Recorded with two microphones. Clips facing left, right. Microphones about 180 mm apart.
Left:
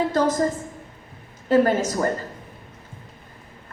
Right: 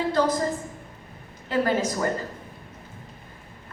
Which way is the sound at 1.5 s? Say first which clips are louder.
Left 5 dB; 45° left (ahead or behind).